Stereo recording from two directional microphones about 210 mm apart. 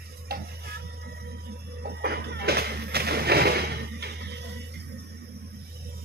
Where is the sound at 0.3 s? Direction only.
45° right (ahead or behind).